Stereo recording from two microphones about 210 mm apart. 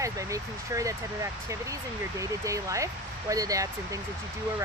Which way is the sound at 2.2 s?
15° right (ahead or behind).